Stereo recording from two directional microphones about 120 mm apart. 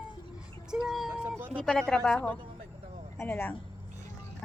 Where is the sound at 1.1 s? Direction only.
15° right (ahead or behind).